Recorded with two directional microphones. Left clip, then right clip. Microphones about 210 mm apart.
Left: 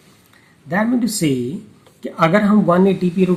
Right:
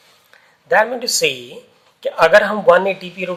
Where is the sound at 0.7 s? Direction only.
35° right (ahead or behind).